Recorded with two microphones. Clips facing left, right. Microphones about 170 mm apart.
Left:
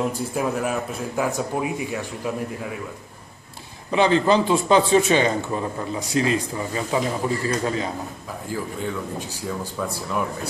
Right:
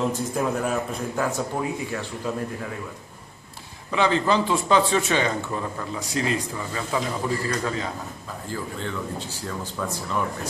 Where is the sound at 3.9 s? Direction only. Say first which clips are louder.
Left 4 dB; 20° left (ahead or behind).